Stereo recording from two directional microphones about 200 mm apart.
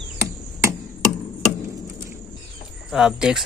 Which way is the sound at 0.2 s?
15° right (ahead or behind).